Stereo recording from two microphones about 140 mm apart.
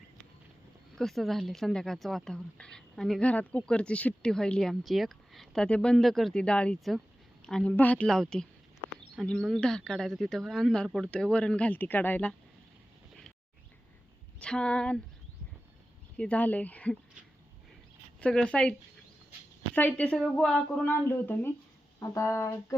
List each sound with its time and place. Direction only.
0.9 s speech: centre (ahead or behind)
14.3 s speech: 5° left (ahead or behind)
16.1 s speech: 10° left (ahead or behind)
18.2 s speech: 10° left (ahead or behind)
20.9 s speech: 15° left (ahead or behind)